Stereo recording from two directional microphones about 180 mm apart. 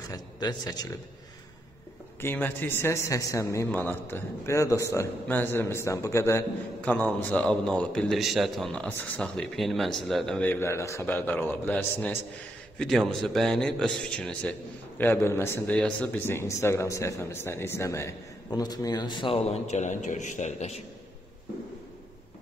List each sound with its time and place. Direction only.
0.1 s speech: 20° left (ahead or behind)
2.2 s a man's voice: 10° left (ahead or behind); by 20.8 s 40° left (ahead or behind)